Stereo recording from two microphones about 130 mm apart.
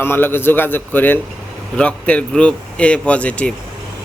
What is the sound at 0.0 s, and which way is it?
Speech, 15° left (ahead or behind).